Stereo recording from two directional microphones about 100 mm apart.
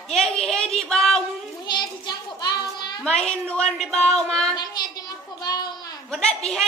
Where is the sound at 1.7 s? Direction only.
45° left (ahead or behind).